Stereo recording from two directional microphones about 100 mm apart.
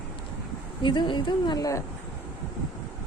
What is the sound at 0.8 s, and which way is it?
Speech, 55° left (ahead or behind).